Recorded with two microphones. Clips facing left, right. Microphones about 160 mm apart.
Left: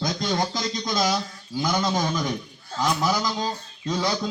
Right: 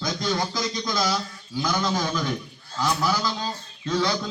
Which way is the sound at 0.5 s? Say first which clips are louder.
Left 1 dB; 25° left (ahead or behind).